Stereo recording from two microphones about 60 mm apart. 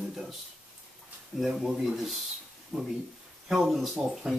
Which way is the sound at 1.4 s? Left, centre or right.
Centre.